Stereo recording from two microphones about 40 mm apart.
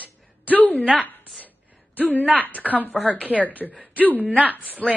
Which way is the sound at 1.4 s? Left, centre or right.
Left.